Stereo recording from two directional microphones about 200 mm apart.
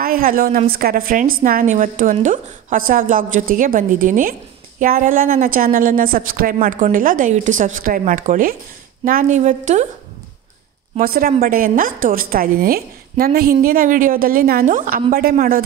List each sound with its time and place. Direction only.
0.0 s a woman's voice: 45° right (ahead or behind)
11.0 s a woman's voice: 45° right (ahead or behind)